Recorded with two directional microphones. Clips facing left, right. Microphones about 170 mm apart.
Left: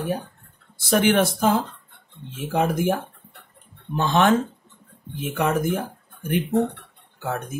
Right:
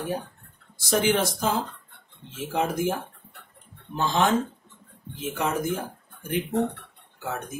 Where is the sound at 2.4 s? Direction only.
55° left (ahead or behind).